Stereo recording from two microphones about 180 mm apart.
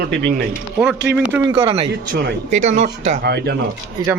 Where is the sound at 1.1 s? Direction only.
5° right (ahead or behind).